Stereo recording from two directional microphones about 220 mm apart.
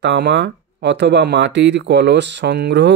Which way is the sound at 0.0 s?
50° right (ahead or behind).